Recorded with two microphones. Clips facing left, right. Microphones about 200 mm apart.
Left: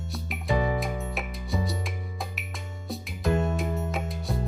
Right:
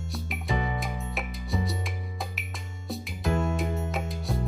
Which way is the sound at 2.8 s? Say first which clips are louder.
Left 2 dB; centre (ahead or behind).